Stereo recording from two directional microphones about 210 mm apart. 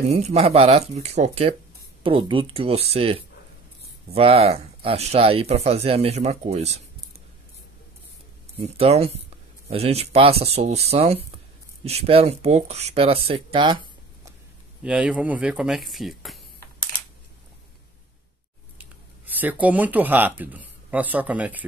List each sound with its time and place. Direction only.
0.1 s speech: 30° right (ahead or behind)
8.5 s speech: 30° right (ahead or behind)
14.8 s speech: 5° right (ahead or behind)
18.8 s speech: 10° right (ahead or behind)